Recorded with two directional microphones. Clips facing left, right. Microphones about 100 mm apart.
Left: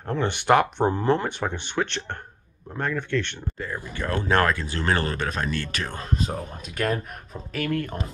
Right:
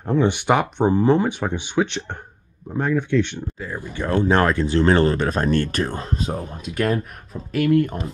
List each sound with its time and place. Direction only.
0.0 s speech: 5° right (ahead or behind); by 5.5 s 30° right (ahead or behind)
5.5 s speech: 45° right (ahead or behind)
5.9 s speech: 25° right (ahead or behind)
6.2 s speech: 5° right (ahead or behind)
7.5 s speech: 15° right (ahead or behind)